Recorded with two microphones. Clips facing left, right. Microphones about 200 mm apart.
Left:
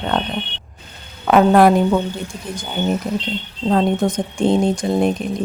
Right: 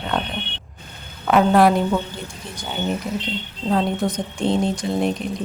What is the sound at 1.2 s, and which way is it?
Speech, 50° left (ahead or behind).